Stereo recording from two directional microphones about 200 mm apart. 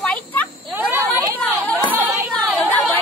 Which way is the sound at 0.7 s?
10° right (ahead or behind).